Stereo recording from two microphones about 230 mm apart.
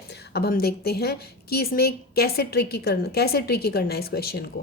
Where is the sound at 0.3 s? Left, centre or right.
Left.